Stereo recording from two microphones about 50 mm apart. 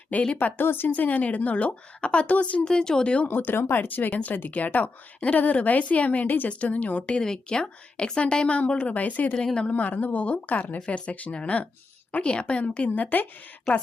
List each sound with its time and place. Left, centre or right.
0.1 s a woman's voice: left
0.3 s a woman's voice: left
2.6 s speech: centre
3.2 s a woman's voice: left
6.5 s a woman's voice: left
7.1 s a woman's voice: centre; by 13.2 s left